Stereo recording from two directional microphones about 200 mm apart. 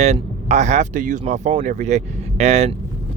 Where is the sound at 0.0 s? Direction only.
35° right (ahead or behind).